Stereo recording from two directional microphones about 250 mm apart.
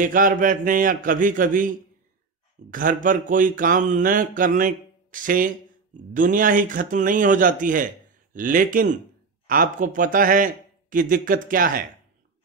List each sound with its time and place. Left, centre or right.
0.0 s mantra: right